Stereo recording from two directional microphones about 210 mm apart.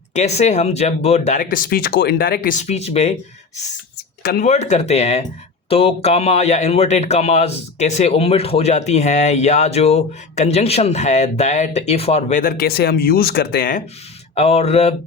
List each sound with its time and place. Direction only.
0.1 s speech: 30° left (ahead or behind)
4.2 s speech: 45° left (ahead or behind)
4.4 s speech: 30° left (ahead or behind)
14.3 s speech: 30° left (ahead or behind)